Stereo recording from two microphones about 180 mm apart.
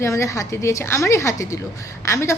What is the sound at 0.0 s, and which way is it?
A woman's voice, 15° left (ahead or behind).